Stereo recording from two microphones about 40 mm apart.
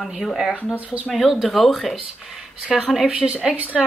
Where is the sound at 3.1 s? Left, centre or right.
Right.